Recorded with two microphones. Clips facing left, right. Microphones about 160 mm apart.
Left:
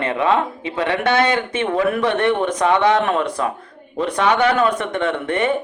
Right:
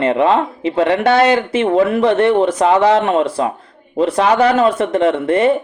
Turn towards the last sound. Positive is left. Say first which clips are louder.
# right 7 dB
turn(degrees=-35)  # may be behind; listen again after turning